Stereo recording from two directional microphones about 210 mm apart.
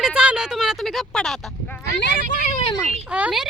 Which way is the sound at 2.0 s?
40° left (ahead or behind).